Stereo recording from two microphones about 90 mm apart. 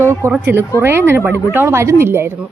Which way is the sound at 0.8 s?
25° right (ahead or behind).